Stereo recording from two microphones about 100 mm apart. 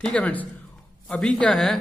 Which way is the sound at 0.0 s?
15° left (ahead or behind).